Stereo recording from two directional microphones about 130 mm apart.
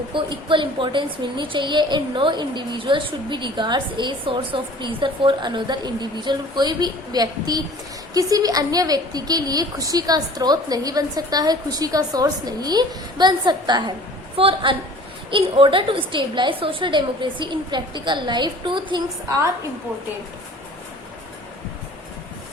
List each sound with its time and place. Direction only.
0.1 s a woman's voice: 40° right (ahead or behind)